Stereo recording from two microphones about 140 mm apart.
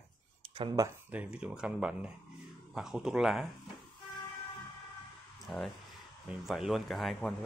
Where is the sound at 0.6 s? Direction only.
35° right (ahead or behind).